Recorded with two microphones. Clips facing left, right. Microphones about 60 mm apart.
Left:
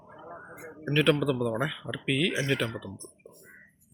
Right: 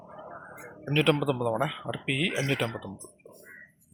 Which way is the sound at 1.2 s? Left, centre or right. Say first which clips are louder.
Right 1 dB; centre.